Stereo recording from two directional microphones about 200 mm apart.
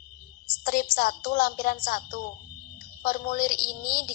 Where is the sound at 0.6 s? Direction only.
45° left (ahead or behind).